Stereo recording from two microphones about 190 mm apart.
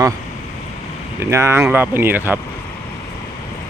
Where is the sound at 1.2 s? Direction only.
15° right (ahead or behind).